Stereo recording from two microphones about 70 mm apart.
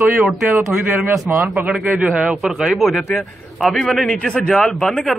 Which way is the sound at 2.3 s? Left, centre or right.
Centre.